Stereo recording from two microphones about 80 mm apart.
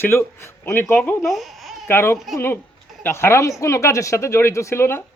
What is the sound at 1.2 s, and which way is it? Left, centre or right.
Babbling, centre.